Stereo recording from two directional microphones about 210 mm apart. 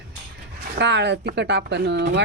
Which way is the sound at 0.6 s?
55° right (ahead or behind).